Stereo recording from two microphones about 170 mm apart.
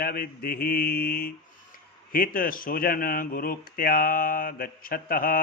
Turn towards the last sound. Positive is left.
turn(degrees=55)  # may be behind; listen again after turning